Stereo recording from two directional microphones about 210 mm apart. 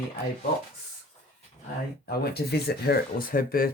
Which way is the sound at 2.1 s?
50° left (ahead or behind).